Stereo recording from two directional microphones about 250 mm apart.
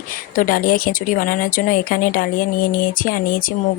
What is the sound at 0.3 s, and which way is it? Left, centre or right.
Speech, left.